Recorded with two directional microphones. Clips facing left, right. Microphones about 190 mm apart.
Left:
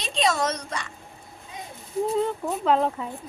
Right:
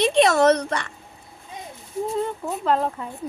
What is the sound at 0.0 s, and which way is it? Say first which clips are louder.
Speech: right 8 dB; 60° right (ahead or behind).